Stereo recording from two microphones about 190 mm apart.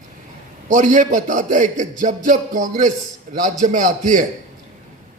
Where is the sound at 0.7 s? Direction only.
45° right (ahead or behind).